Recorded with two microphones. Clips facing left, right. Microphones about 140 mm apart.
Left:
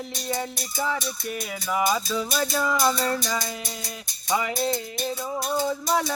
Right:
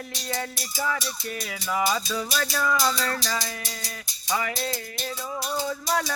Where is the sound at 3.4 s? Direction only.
55° left (ahead or behind).